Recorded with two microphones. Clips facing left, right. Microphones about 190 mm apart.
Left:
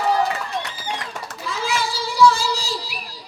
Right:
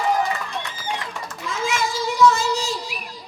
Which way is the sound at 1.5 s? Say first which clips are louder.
Right 1 dB; 35° left (ahead or behind).